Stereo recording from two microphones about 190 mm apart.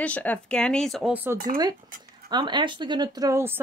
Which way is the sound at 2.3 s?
25° right (ahead or behind).